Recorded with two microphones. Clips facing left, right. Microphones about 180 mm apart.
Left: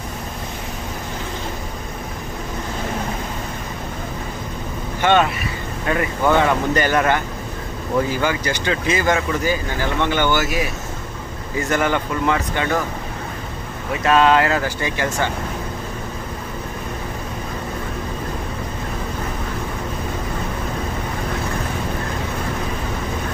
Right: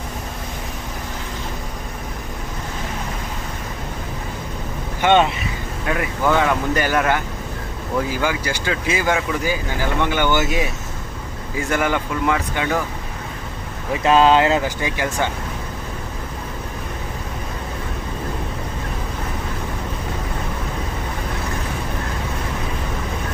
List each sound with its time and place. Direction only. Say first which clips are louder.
5.0 s speech: right 1 dB; 20° right (ahead or behind)
5.8 s speech: left 2 dB; 5° right (ahead or behind); by 10.7 s 20° right (ahead or behind)
11.5 s speech: left 1 dB; 10° right (ahead or behind)
14.0 s speech: right 1 dB; 25° right (ahead or behind)